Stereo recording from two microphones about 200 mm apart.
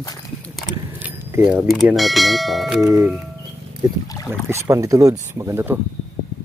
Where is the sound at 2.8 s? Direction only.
15° right (ahead or behind).